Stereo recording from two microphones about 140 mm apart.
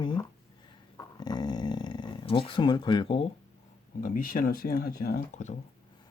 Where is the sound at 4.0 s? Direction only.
80° left.